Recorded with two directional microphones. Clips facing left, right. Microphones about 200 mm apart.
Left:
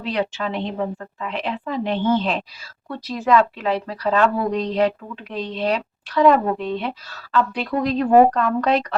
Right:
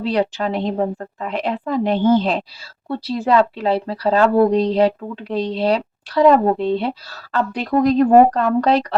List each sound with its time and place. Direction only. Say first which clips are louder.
0.0 s a woman's voice: right 5 dB; 35° right (ahead or behind)